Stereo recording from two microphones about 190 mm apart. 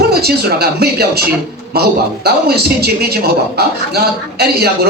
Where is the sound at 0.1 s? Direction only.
55° right (ahead or behind).